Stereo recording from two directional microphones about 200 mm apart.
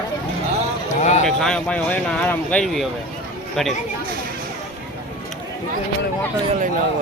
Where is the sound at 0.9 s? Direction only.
35° left (ahead or behind).